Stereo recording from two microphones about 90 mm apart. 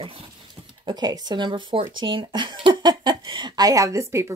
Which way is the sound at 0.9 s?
50° right (ahead or behind).